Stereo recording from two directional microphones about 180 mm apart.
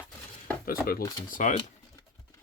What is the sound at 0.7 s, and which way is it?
Speech, 55° left (ahead or behind).